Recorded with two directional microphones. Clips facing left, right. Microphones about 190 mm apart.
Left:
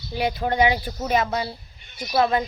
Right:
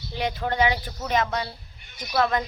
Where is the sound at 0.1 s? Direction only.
10° left (ahead or behind).